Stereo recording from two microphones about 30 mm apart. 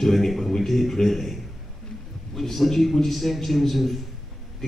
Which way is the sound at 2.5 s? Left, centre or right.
Centre.